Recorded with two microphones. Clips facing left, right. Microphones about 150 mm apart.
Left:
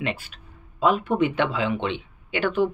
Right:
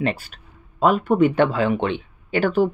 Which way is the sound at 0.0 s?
40° right (ahead or behind).